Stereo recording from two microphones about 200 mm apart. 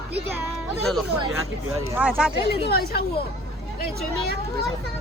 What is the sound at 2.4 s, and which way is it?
Speech, 55° left (ahead or behind).